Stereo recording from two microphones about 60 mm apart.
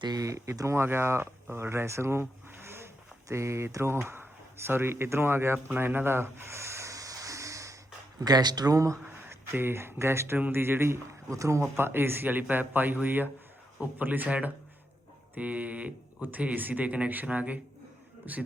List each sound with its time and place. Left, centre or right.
0.1 s speech: right
0.5 s speech: right
0.9 s speech: right
3.2 s speech: right
5.7 s a sound: right
8.5 s speech: right
9.3 s a man's voice: right
11.3 s speech: right
11.8 s a man's voice: right